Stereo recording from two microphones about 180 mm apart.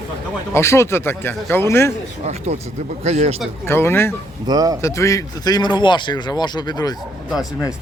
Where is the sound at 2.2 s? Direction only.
35° right (ahead or behind).